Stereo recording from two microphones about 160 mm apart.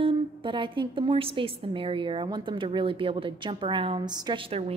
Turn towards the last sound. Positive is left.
turn(degrees=-30)  # may be behind; listen again after turning